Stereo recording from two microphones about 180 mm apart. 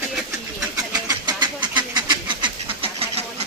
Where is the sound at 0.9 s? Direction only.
20° right (ahead or behind).